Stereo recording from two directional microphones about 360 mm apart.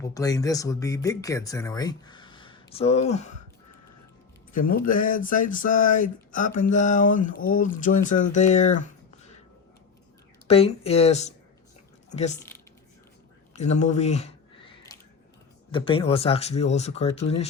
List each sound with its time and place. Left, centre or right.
0.0 s speech: centre
4.5 s speech: left
10.4 s speech: centre
13.5 s a sound: centre
15.7 s speech: centre